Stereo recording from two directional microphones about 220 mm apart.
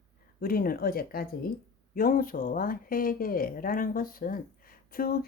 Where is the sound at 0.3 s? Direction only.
40° left (ahead or behind).